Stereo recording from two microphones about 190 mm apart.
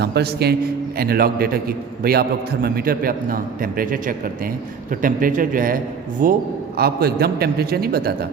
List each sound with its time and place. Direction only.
0.0 s a man's voice: 60° right (ahead or behind)